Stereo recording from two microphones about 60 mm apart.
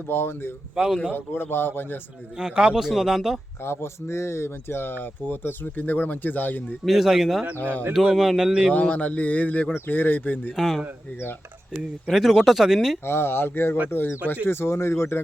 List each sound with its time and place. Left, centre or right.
0.1 s speech: left
0.8 s speech: centre
1.1 s speech: left
2.4 s speech: centre
3.6 s speech: left
6.8 s speech: centre
7.6 s speech: left
7.9 s speech: centre
8.7 s speech: left
10.5 s speech: centre
12.0 s speech: centre
13.1 s speech: left